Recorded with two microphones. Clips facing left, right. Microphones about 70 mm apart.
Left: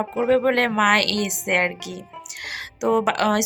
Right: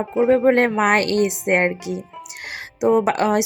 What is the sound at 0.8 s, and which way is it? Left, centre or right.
Speech, right.